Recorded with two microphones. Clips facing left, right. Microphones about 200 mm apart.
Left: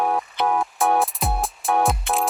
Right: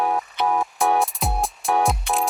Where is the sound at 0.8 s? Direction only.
Centre (ahead or behind).